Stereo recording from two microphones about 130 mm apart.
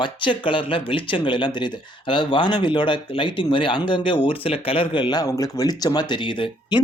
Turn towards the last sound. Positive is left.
turn(degrees=40)  # may be behind; listen again after turning